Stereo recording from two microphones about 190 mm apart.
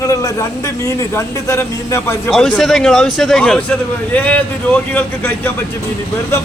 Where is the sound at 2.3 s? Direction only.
Centre (ahead or behind).